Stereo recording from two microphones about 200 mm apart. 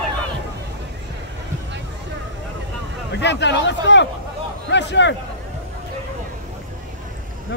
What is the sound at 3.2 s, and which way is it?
Speech, 60° left (ahead or behind).